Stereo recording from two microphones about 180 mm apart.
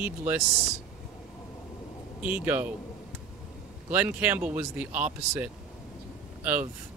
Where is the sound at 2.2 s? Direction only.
10° right (ahead or behind).